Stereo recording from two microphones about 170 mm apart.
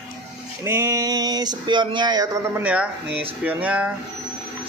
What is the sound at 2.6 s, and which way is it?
A man's voice, 10° right (ahead or behind).